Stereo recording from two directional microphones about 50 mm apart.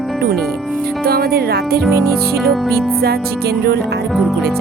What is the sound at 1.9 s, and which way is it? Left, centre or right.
Music, right.